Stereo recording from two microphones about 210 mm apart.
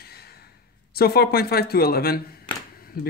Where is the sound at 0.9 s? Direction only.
50° left (ahead or behind).